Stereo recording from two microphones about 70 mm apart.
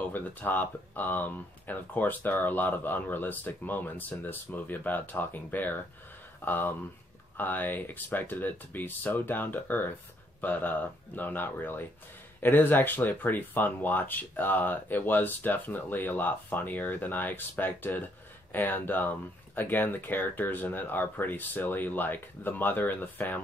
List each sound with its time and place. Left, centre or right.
0.1 s speech: left